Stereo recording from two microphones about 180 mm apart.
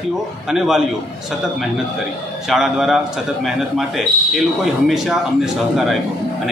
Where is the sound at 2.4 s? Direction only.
Centre (ahead or behind).